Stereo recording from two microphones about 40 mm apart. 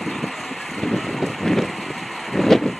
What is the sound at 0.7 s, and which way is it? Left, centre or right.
Vehicle, centre.